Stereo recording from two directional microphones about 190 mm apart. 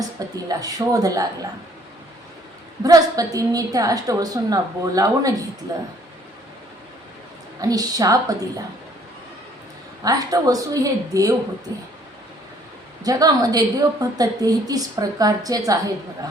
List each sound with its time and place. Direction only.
0.4 s a woman's voice: 20° right (ahead or behind)
2.8 s a woman's voice: 20° right (ahead or behind)
7.6 s a woman's voice: 20° right (ahead or behind)
10.0 s a woman's voice: 20° right (ahead or behind)
13.1 s a woman's voice: 20° right (ahead or behind)